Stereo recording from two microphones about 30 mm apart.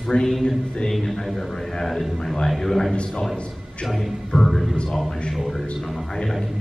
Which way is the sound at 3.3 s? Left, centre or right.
Left.